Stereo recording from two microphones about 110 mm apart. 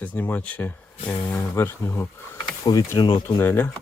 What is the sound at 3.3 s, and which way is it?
Speech, 20° left (ahead or behind).